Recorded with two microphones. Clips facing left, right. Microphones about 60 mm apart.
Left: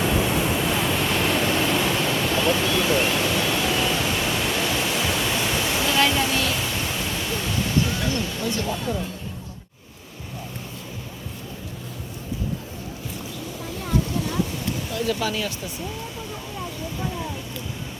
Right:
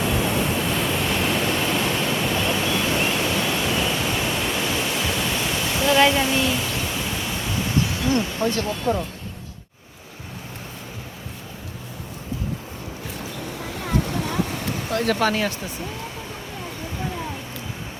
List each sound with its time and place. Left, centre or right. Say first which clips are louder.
0.0 s waves: even; centre
5.9 s waterfall: right 5 dB; centre
6.3 s music: right 2 dB; centre
6.6 s music: right 1 dB; centre
7.9 s music: right 4 dB; right
8.9 s speech: right 9 dB; right
13.7 s a sound: even; right